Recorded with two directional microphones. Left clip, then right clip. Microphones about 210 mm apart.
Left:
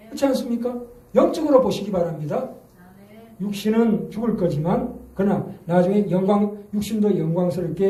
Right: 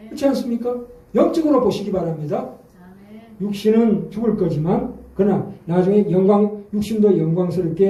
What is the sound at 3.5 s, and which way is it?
A man's voice, 55° left (ahead or behind).